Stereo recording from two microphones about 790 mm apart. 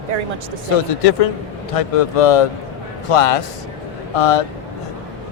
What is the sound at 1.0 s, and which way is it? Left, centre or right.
A man's voice, left.